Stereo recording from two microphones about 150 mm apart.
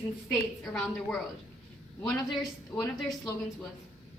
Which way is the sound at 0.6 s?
5° left (ahead or behind).